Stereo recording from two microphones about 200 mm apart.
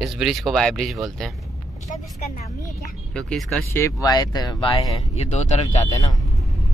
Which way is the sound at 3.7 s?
15° left (ahead or behind).